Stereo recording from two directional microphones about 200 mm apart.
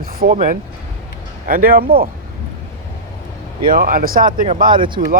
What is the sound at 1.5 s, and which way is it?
Speech, 45° right (ahead or behind).